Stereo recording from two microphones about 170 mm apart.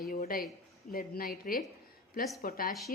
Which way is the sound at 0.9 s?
65° left (ahead or behind).